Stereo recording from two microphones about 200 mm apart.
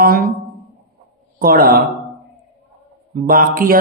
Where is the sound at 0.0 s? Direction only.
50° right (ahead or behind).